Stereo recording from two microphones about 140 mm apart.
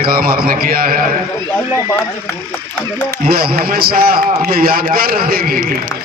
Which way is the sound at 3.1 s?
90° right.